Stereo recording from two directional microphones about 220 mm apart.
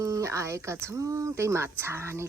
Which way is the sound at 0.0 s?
15° right (ahead or behind).